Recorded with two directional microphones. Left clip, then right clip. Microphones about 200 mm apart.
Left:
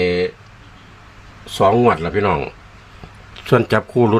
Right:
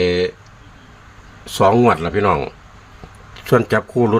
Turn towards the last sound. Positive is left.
turn(degrees=10)  # may be behind; listen again after turning